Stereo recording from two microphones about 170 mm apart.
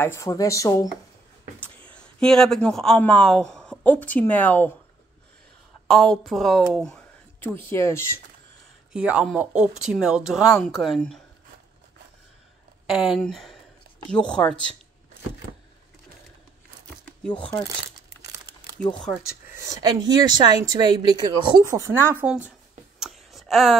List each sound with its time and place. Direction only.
0.0 s speech: 15° left (ahead or behind)
1.9 s speech: 5° left (ahead or behind)
5.9 s speech: centre (ahead or behind)
6.7 s a sound: 5° left (ahead or behind)
7.4 s speech: 15° left (ahead or behind)
8.9 s speech: 5° right (ahead or behind)
12.8 s speech: centre (ahead or behind)
18.9 s speech: 5° left (ahead or behind)
19.5 s speech: 20° right (ahead or behind)
22.9 s a sound: centre (ahead or behind)